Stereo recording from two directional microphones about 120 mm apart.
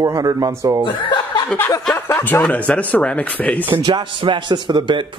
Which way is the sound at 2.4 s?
10° left (ahead or behind).